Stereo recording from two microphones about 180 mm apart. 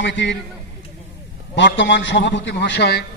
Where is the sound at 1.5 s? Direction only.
90° left; by 3.0 s 65° left (ahead or behind).